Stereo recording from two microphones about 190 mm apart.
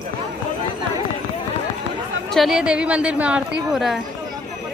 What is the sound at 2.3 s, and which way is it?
A woman's voice, centre (ahead or behind).